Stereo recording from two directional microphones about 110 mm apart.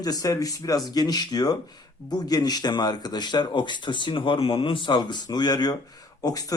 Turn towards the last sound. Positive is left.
turn(degrees=35)  # may be behind; listen again after turning